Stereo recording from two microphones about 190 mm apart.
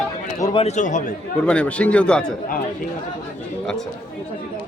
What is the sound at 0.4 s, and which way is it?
Speech, 30° left (ahead or behind).